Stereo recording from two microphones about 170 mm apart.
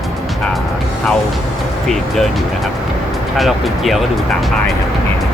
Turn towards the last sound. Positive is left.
turn(degrees=0)  # may be behind; listen again after turning